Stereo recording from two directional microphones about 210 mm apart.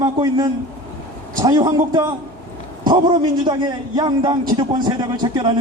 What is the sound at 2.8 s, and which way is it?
A man's voice, 20° right (ahead or behind).